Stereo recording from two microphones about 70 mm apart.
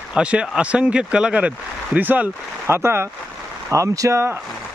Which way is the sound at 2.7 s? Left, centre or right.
Right.